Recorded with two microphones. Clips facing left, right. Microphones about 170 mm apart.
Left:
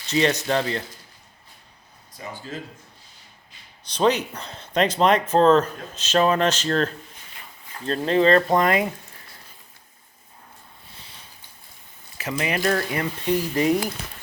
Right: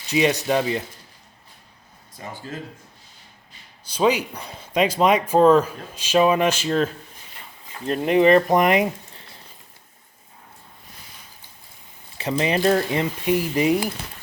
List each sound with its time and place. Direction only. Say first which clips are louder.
0.1 s speech: right 1 dB; 10° right (ahead or behind)
3.8 s speech: right 1 dB; 10° right (ahead or behind)
12.1 s speech: right 4 dB; 30° right (ahead or behind); by 13.9 s 10° right (ahead or behind)